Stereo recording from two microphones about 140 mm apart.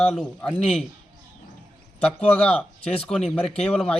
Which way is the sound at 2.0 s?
10° left (ahead or behind).